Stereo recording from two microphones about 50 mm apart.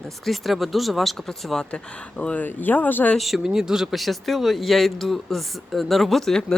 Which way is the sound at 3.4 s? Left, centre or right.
Centre.